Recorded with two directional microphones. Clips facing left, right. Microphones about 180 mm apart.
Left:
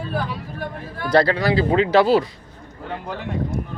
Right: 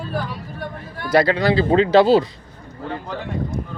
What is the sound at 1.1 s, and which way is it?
Speech, 15° right (ahead or behind).